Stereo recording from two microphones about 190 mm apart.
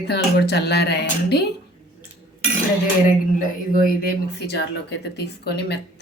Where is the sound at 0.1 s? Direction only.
60° left (ahead or behind).